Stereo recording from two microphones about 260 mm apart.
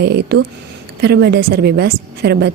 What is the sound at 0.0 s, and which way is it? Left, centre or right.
Speech, right.